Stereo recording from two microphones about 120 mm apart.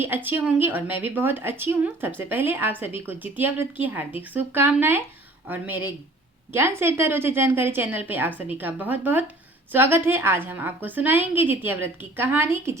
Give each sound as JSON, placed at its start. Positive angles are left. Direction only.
{"t": 0.0, "sound": "a woman's voice", "side_deg": -20}